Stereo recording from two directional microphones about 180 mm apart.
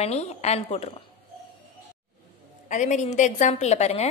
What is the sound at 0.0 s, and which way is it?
A woman's voice, 35° left (ahead or behind).